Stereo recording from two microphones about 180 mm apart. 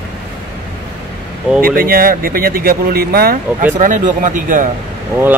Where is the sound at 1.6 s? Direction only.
55° right (ahead or behind).